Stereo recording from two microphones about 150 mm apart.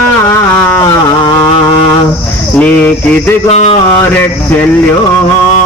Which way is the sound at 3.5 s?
45° left (ahead or behind).